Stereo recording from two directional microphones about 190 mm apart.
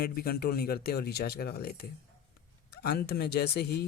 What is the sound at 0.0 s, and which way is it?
Speech, 55° left (ahead or behind).